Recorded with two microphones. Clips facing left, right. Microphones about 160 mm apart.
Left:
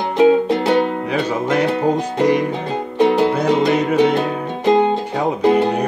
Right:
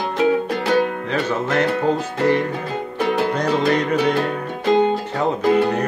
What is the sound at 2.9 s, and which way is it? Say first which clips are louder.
Music: left 6 dB; 25° left (ahead or behind).